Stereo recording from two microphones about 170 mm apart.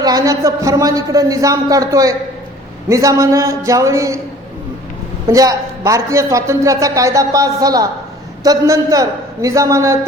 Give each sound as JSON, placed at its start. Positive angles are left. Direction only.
{"t": 0.0, "sound": "a man's voice", "side_deg": -20}
{"t": 5.3, "sound": "a man's voice", "side_deg": -20}